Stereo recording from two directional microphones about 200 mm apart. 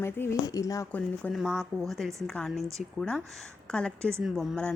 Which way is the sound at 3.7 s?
5° left (ahead or behind).